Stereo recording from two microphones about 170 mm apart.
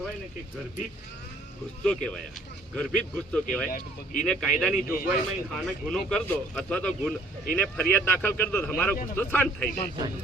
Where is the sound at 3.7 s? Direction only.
55° left (ahead or behind).